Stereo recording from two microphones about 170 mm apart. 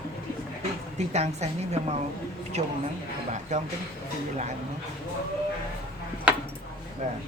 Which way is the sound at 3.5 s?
45° right (ahead or behind).